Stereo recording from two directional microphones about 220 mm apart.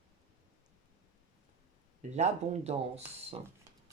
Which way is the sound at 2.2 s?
30° right (ahead or behind).